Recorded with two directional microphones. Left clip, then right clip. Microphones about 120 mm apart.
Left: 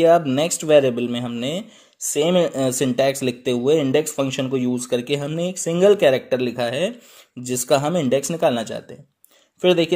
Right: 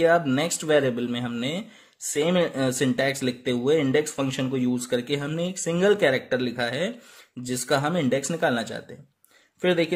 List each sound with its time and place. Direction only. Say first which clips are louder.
0.0 s speech: left 5 dB; 25° left (ahead or behind)